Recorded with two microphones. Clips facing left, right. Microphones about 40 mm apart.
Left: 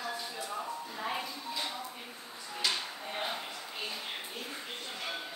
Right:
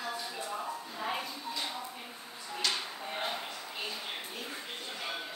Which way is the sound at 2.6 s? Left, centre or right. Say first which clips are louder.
Even; centre.